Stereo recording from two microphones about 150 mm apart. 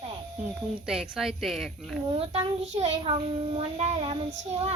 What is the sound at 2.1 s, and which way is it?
A child's voice, 40° right (ahead or behind).